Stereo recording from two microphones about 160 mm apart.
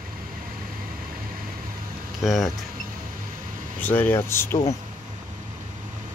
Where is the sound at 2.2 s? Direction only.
Centre (ahead or behind).